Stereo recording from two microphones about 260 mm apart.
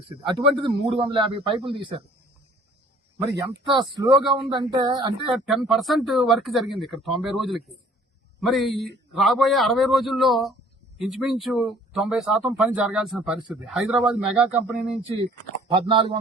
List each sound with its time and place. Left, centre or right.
0.3 s a man's voice: centre
3.2 s speech: centre
5.3 s a man's voice: centre
15.6 s a man's voice: centre